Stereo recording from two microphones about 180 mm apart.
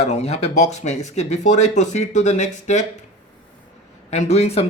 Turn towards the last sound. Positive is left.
turn(degrees=35)  # may be behind; listen again after turning